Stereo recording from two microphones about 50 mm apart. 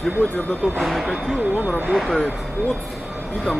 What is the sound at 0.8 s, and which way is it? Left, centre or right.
Speech, centre.